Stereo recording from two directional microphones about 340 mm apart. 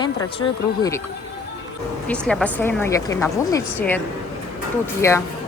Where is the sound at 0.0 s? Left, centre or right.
Centre.